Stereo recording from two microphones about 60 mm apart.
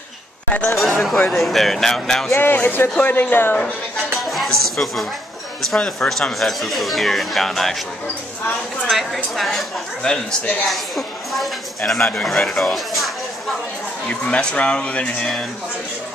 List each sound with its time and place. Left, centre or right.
0.7 s speech: centre
2.3 s speech: left
4.2 s music: centre
5.9 s speech: centre
8.8 s speech: centre
10.0 s speech: centre
10.7 s a sound: centre
12.3 s speech: centre
14.0 s speech: centre